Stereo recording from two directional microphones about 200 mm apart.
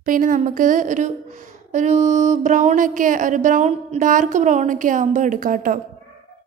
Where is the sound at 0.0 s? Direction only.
40° right (ahead or behind).